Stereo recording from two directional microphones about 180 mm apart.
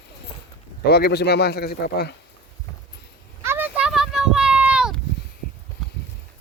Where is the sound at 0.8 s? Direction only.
65° left (ahead or behind).